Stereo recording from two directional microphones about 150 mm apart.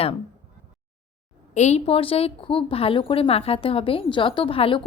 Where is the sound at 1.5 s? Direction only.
50° left (ahead or behind).